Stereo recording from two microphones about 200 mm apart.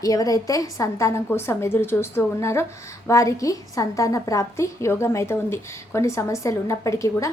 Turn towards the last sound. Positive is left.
turn(degrees=15)  # may be behind; listen again after turning